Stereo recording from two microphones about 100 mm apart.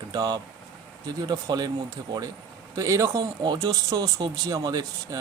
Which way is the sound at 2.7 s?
30° right (ahead or behind).